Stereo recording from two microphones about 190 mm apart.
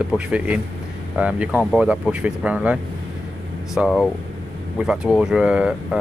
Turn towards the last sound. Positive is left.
turn(degrees=-5)  # may be behind; listen again after turning